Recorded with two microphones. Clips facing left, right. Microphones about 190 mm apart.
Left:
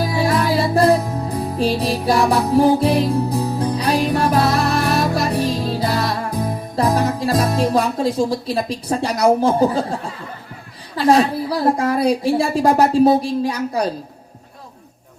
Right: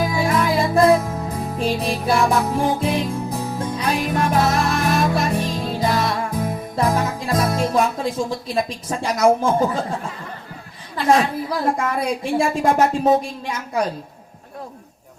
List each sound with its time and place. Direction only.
0.0 s music: 35° left (ahead or behind)
8.5 s a woman's voice: 35° left (ahead or behind)
10.9 s a woman's voice: 35° left (ahead or behind)